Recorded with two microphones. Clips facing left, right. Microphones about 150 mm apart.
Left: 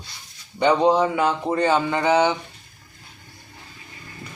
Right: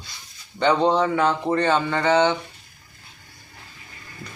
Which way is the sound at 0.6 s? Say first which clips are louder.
Left 1 dB; 10° left (ahead or behind).